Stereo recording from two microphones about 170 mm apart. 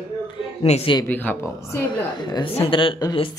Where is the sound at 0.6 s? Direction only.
40° left (ahead or behind).